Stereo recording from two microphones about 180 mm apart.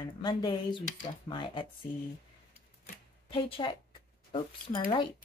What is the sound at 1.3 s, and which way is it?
Speech, 25° left (ahead or behind).